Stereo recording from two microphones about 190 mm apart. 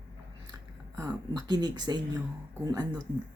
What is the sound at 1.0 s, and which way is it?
Speech, 20° right (ahead or behind).